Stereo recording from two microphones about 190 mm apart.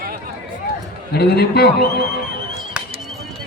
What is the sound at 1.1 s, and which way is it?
Music, 55° left (ahead or behind).